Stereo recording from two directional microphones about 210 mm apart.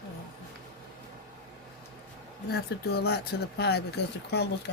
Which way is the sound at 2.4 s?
50° left (ahead or behind).